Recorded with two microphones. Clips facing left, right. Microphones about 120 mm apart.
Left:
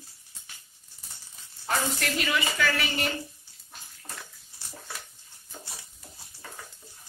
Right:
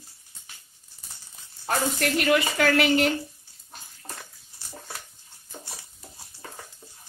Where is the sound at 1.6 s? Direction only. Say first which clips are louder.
Right 3 dB; 60° right (ahead or behind).